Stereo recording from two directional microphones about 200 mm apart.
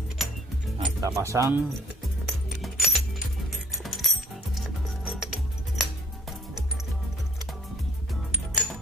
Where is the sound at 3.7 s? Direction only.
Centre (ahead or behind).